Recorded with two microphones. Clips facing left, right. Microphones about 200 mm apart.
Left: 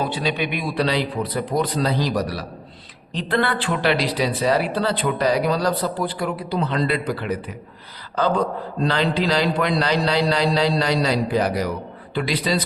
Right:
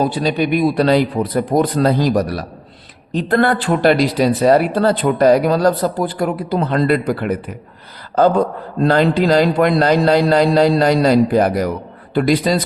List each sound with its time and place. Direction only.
0.0 s speech: 40° right (ahead or behind)